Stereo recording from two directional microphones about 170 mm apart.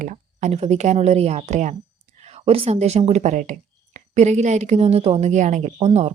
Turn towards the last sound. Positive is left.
turn(degrees=-40)  # may be behind; listen again after turning